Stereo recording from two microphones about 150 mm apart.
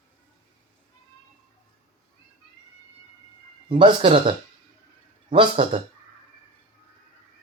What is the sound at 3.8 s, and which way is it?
Speech, 35° right (ahead or behind).